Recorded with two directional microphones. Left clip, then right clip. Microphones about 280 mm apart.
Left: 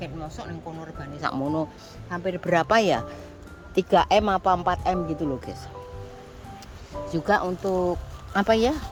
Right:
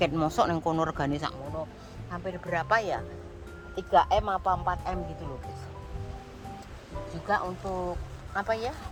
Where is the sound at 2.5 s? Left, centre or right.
Left.